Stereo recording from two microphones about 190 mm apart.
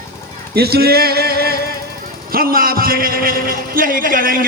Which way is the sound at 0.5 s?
55° right (ahead or behind).